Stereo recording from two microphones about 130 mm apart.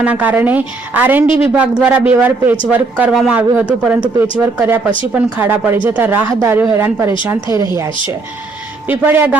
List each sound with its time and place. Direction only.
0.0 s a woman's voice: 10° right (ahead or behind)
8.9 s a woman's voice: 15° right (ahead or behind)